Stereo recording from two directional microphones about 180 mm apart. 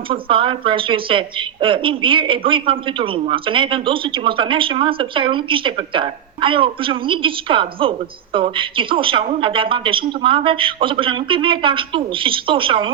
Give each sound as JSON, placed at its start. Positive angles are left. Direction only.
{"t": 0.1, "sound": "a woman's voice", "side_deg": -30}